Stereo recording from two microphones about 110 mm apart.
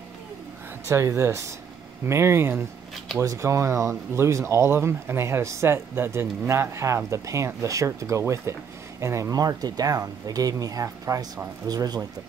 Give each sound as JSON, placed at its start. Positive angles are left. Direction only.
{"t": 0.8, "sound": "speech", "side_deg": -25}